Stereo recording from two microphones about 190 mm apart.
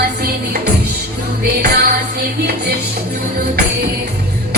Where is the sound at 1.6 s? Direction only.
55° right (ahead or behind).